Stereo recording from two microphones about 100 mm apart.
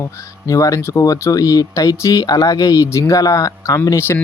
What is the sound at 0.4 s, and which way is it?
Speech, 35° left (ahead or behind).